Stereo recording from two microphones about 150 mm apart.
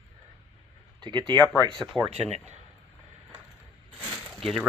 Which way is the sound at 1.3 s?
30° right (ahead or behind).